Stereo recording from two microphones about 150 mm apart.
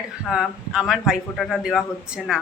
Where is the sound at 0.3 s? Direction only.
5° right (ahead or behind).